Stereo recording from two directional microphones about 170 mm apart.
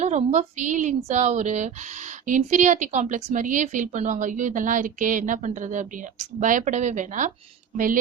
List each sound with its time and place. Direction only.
0.0 s a woman's voice: 45° right (ahead or behind)